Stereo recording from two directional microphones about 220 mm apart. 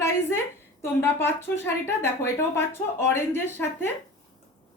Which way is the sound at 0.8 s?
10° left (ahead or behind).